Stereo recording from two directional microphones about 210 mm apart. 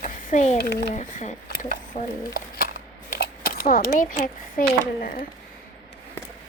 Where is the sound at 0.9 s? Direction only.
35° left (ahead or behind).